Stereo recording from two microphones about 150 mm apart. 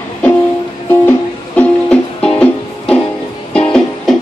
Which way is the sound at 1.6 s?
10° left (ahead or behind).